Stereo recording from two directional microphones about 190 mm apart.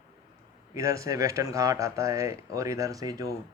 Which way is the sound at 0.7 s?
15° right (ahead or behind).